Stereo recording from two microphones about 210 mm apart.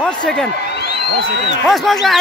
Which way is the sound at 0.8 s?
55° left (ahead or behind).